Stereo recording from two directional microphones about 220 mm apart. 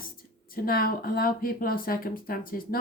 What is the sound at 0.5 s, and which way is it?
Speech, 40° left (ahead or behind).